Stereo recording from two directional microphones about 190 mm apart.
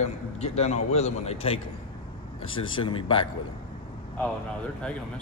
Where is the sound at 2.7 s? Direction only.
25° left (ahead or behind).